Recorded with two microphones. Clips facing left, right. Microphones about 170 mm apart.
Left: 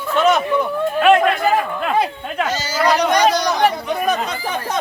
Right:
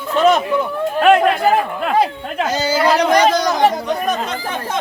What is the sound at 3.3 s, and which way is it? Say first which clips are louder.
Speech: right 2 dB; 50° right (ahead or behind).